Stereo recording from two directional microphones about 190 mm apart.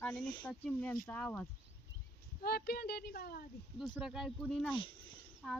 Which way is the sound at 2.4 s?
55° left (ahead or behind).